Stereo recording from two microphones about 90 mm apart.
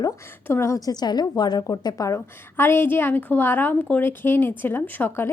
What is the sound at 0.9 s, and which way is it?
A woman's voice, 50° left (ahead or behind).